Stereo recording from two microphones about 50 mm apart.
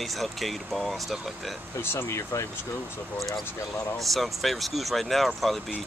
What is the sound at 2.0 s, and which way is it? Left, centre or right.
Speech, left.